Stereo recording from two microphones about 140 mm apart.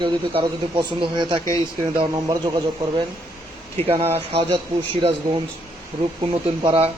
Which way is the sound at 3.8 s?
45° right (ahead or behind).